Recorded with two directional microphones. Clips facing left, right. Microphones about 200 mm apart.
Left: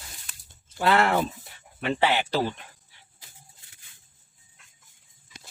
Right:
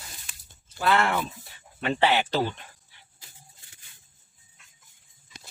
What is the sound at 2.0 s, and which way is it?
Speech, 5° left (ahead or behind).